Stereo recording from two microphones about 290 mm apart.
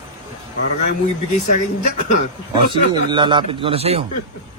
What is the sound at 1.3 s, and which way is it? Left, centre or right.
Speech, left.